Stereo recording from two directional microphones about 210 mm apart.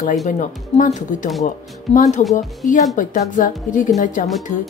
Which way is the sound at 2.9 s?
40° left (ahead or behind).